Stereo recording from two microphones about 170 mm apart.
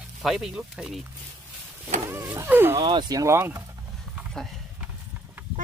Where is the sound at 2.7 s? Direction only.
25° right (ahead or behind).